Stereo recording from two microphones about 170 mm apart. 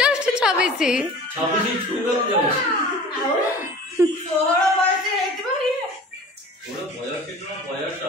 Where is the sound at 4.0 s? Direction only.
15° right (ahead or behind).